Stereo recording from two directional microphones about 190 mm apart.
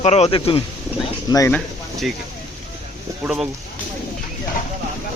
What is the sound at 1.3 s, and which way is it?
Speech, 15° left (ahead or behind).